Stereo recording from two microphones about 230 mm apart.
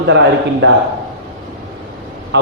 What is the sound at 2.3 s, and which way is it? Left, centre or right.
Speech, right.